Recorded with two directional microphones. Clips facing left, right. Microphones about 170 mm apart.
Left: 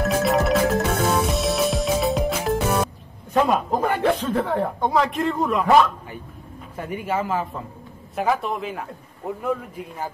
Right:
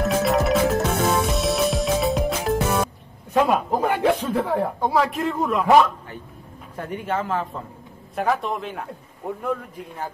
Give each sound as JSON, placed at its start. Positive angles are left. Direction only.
{"t": 0.0, "sound": "music", "side_deg": 0}
{"t": 3.3, "sound": "speech", "side_deg": -5}
{"t": 6.8, "sound": "a man's voice", "side_deg": 10}